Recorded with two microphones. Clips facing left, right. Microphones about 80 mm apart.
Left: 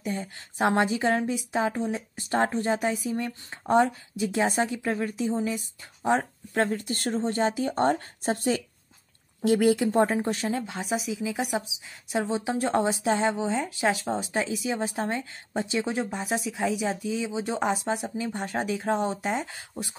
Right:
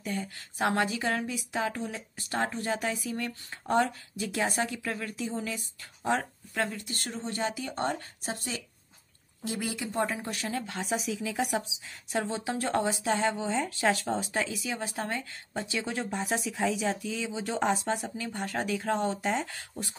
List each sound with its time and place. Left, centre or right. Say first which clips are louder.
0.0 s a woman's voice: left 3 dB; left
6.5 s speech: left 6 dB; left
10.7 s a woman's voice: left 2 dB; centre
17.0 s a woman's voice: left 5 dB; left
17.6 s speech: left 2 dB; centre
18.1 s a woman's voice: left 4 dB; left